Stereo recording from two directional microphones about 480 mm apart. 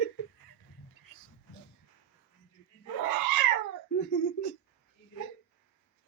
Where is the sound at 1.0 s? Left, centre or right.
Left.